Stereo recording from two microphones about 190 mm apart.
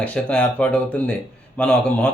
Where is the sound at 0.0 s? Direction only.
5° left (ahead or behind).